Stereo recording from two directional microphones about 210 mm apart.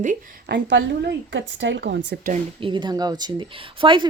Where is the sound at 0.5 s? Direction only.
55° right (ahead or behind).